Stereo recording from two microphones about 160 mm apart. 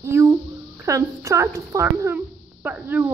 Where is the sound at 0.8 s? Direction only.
20° right (ahead or behind).